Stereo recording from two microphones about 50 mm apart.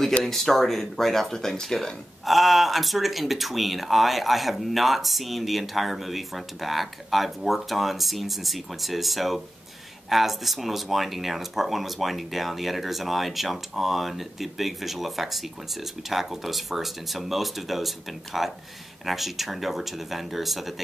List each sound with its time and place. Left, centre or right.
0.2 s speech: centre